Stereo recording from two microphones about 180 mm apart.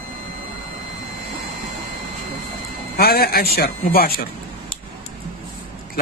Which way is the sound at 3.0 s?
55° left (ahead or behind).